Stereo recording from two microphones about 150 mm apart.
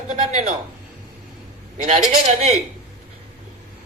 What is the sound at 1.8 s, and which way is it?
Speech, 50° right (ahead or behind).